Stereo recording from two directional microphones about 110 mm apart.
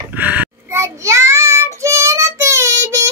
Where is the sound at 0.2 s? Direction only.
15° right (ahead or behind).